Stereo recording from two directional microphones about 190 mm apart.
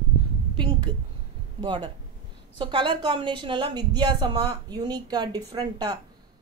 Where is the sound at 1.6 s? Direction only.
25° right (ahead or behind).